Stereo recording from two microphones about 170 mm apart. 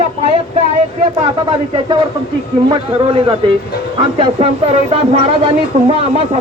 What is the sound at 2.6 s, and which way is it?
Speech, 30° right (ahead or behind).